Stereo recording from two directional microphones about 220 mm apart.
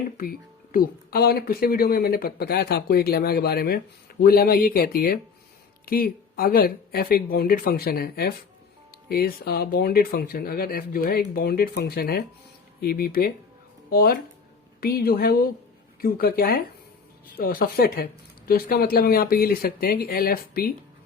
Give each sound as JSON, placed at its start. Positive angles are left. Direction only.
{"t": 0.2, "sound": "speech", "side_deg": 40}